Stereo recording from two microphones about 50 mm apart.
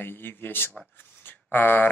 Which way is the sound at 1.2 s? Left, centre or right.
Left.